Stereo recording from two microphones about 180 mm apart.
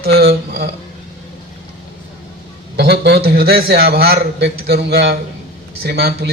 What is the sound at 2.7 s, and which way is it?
A man's voice, 65° right (ahead or behind).